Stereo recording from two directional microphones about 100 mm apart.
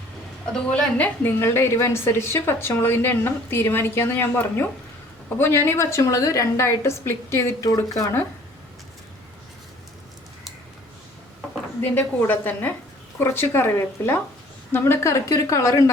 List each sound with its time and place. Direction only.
0.5 s a woman's voice: 10° left (ahead or behind)
1.4 s a woman's voice: 25° left (ahead or behind)
11.8 s a woman's voice: 20° left (ahead or behind)